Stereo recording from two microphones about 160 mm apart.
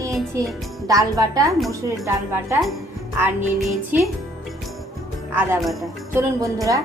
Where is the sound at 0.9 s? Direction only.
25° right (ahead or behind).